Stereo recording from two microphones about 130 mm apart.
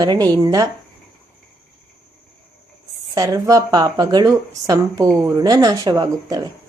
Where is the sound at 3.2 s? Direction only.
25° right (ahead or behind).